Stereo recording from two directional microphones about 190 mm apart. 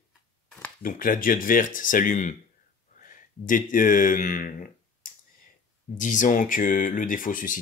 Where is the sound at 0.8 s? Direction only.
45° left (ahead or behind).